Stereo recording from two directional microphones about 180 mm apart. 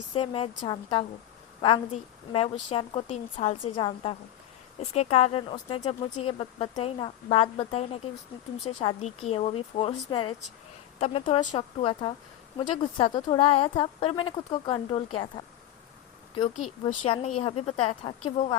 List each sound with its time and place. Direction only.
0.1 s a woman's voice: 30° left (ahead or behind)
2.3 s a woman's voice: 30° left (ahead or behind)
16.8 s speech: 30° left (ahead or behind)